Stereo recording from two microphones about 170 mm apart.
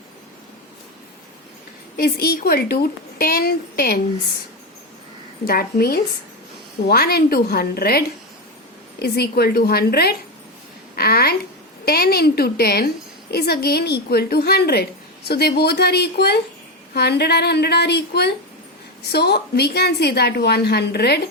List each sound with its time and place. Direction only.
2.0 s a woman's voice: 65° left (ahead or behind)
5.5 s a woman's voice: 60° left (ahead or behind)